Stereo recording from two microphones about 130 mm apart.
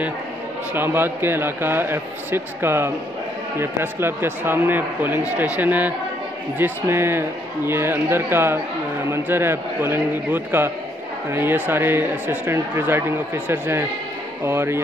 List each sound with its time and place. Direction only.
0.7 s speech: 15° right (ahead or behind)